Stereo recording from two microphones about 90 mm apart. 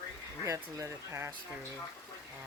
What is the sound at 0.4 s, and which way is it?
Speech, 35° right (ahead or behind).